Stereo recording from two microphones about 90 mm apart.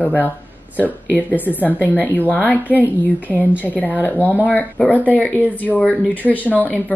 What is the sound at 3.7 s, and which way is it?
Speech, 20° left (ahead or behind).